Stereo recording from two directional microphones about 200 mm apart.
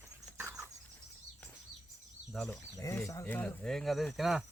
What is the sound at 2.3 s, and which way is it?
Speech, centre (ahead or behind).